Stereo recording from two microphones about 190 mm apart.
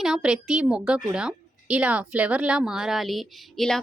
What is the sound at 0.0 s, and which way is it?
A woman's voice, 5° right (ahead or behind).